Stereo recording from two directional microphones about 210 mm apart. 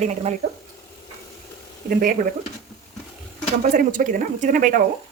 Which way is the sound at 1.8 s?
40° right (ahead or behind).